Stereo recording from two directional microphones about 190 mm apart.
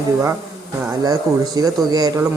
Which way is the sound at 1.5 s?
20° right (ahead or behind).